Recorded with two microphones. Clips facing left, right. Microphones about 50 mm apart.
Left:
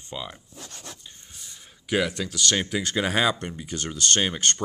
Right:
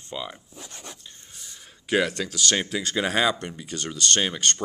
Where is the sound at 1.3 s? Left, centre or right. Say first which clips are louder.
Right 1 dB; centre.